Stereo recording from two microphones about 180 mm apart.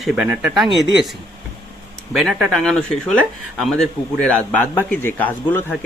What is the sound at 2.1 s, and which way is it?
Speech, centre (ahead or behind).